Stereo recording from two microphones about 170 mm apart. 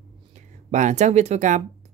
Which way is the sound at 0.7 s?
45° right (ahead or behind).